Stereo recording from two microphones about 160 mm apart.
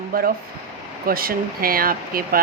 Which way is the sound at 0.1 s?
65° right (ahead or behind).